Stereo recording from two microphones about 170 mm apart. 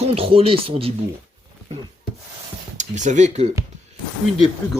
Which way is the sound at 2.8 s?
45° right (ahead or behind).